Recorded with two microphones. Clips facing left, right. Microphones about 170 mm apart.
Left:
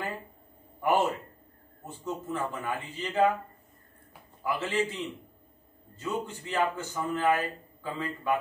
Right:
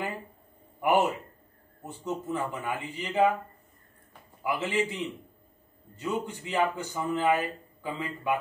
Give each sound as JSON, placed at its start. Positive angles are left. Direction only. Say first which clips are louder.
{"t": 0.7, "sound": "a man's voice", "louder": "right 1 dB", "side_deg": -15}
{"t": 4.4, "sound": "speech", "louder": "right 1 dB", "side_deg": -15}